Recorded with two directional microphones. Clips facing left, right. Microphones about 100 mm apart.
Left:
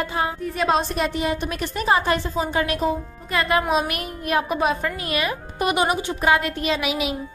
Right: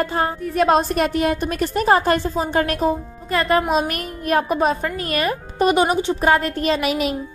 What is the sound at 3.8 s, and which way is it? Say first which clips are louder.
A woman's voice: right 3 dB; 40° right (ahead or behind).